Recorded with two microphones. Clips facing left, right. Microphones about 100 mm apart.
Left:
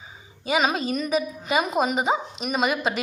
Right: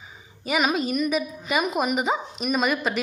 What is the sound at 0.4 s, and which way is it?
A woman's voice, 30° left (ahead or behind).